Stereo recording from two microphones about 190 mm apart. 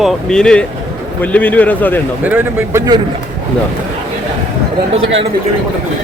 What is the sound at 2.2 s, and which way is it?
Speech, 10° right (ahead or behind).